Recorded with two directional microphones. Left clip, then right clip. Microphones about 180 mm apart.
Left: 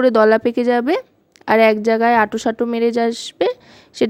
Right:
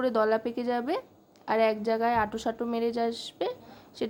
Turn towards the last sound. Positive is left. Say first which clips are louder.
# left 12 dB
turn(degrees=45)  # may be behind; listen again after turning